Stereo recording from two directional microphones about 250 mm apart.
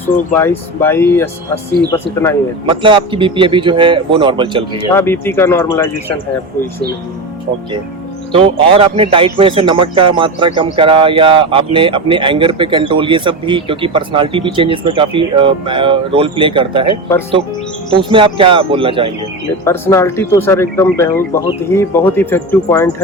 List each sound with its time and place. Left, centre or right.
0.3 s speech: centre
2.6 s a man's voice: centre
4.9 s speech: centre
8.3 s a man's voice: right
17.9 s a man's voice: centre
19.6 s speech: centre